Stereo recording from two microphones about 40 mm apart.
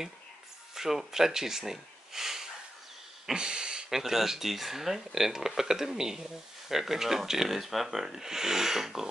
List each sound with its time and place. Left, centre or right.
0.7 s speech: centre
3.9 s speech: centre